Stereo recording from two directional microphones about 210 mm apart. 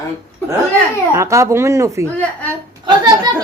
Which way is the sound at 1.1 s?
15° right (ahead or behind).